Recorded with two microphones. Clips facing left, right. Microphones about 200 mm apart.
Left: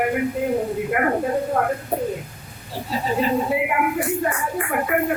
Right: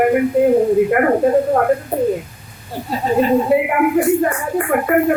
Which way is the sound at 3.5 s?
50° right (ahead or behind).